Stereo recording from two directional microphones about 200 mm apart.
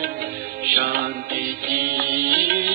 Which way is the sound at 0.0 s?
45° right (ahead or behind).